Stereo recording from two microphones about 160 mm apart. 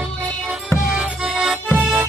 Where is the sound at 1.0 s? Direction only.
5° right (ahead or behind).